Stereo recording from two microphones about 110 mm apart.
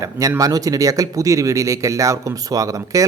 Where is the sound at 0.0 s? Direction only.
30° right (ahead or behind).